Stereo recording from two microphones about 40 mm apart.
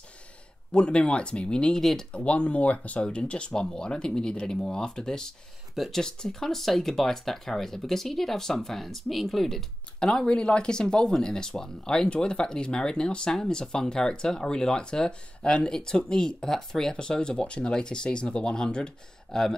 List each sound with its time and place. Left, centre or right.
0.7 s speech: left
1.8 s speech: centre
2.1 s speech: left
3.1 s speech: left; by 9.7 s centre
9.9 s speech: centre